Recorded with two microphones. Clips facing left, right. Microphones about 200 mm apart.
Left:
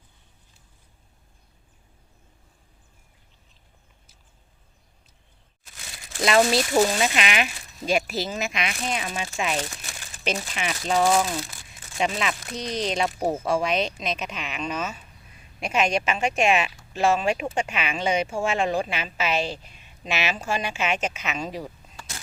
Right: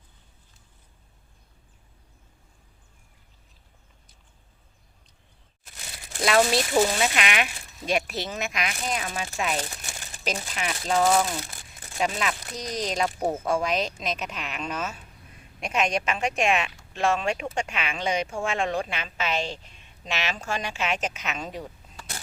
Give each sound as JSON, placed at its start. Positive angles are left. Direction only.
{"t": 6.2, "sound": "speech", "side_deg": 0}
{"t": 12.5, "sound": "speech", "side_deg": 30}
{"t": 12.9, "sound": "speech", "side_deg": 5}